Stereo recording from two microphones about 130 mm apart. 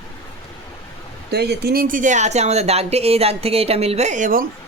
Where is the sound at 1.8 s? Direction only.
90° right.